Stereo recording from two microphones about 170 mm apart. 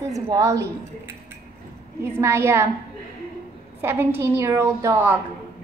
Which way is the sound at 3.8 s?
10° right (ahead or behind).